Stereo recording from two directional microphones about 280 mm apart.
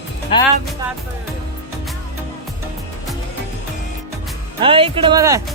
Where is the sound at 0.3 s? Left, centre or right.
Centre.